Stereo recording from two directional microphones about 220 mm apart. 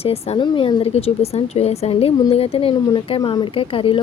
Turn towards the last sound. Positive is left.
turn(degrees=25)  # may be behind; listen again after turning